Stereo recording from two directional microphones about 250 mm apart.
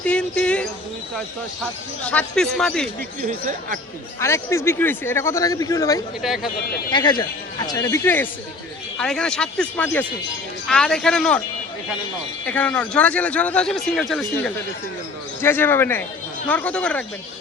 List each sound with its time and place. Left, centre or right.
0.0 s speech: centre
2.0 s speech: centre
3.2 s speech: right
4.2 s speech: centre
6.2 s speech: centre
6.9 s speech: centre
12.5 s speech: centre